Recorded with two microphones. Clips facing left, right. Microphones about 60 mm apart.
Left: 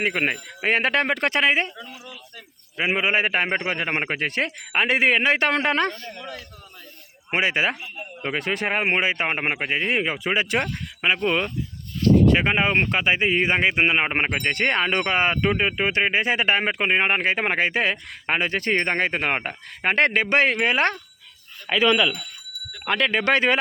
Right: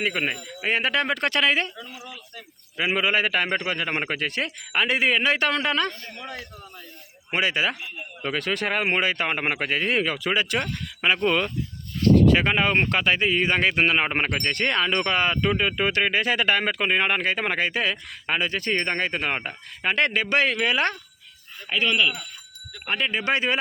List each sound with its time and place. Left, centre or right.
0.0 s a man's voice: left
1.3 s speech: left
2.7 s a man's voice: left
6.1 s a man's voice: centre
7.3 s a man's voice: left
11.0 s speech: centre
12.5 s a man's voice: centre; by 21.0 s left
21.7 s speech: left
23.2 s speech: left